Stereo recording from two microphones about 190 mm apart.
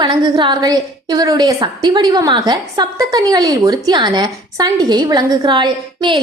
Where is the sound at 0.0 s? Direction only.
25° right (ahead or behind).